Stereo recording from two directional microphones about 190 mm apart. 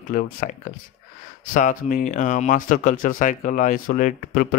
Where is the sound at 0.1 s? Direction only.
45° left (ahead or behind).